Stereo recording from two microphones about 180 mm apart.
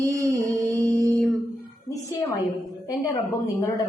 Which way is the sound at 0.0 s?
15° right (ahead or behind).